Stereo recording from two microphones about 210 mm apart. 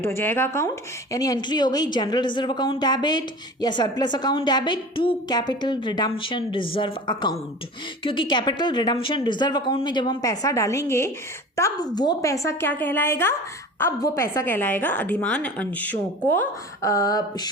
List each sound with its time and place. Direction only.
0.0 s a woman's voice: 10° left (ahead or behind)